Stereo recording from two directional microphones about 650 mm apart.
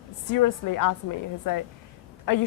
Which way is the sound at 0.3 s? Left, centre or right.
Left.